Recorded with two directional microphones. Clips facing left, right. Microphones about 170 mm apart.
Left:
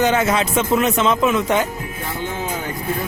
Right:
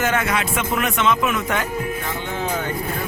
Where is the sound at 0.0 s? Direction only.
20° left (ahead or behind).